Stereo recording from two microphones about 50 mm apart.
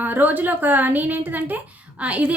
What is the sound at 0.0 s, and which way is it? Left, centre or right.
A woman's voice, right.